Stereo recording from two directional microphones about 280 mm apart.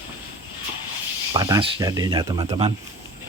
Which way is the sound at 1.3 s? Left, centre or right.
Centre.